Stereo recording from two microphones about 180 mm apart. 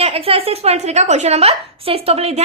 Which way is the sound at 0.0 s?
35° right (ahead or behind).